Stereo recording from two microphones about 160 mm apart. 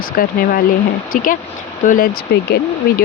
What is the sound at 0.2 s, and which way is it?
Speech, 65° left (ahead or behind).